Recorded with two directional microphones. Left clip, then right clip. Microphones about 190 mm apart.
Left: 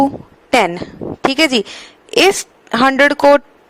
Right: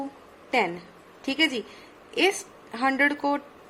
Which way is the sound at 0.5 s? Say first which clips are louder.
Left 12 dB; 55° left (ahead or behind).